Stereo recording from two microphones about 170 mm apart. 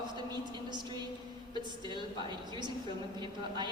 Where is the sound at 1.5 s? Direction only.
25° right (ahead or behind).